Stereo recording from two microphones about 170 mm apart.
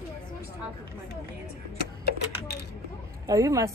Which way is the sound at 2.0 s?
75° left (ahead or behind).